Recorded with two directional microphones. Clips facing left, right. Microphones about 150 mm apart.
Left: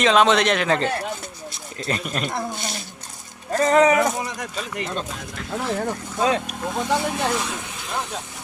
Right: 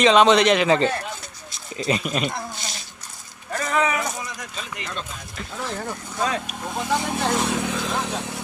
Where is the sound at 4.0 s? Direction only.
60° left (ahead or behind).